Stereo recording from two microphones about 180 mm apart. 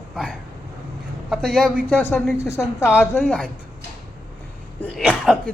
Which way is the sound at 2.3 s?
15° left (ahead or behind).